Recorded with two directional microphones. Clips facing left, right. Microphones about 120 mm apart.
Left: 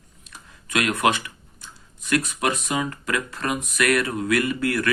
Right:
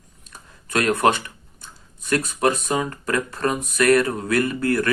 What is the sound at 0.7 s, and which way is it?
Speech, 40° right (ahead or behind).